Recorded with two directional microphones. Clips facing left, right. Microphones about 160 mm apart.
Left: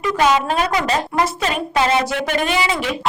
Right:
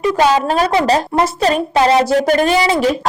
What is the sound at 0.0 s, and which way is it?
A woman's voice, 30° right (ahead or behind).